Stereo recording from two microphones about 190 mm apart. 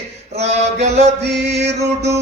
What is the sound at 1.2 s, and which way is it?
Mantra, 60° right (ahead or behind).